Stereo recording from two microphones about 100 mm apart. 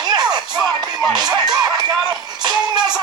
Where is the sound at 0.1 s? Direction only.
40° right (ahead or behind).